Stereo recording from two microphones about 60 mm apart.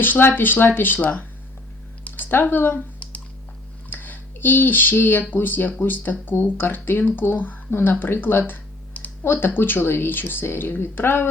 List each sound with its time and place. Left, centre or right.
0.0 s speech: left
3.8 s a sound: left
5.3 s speech: left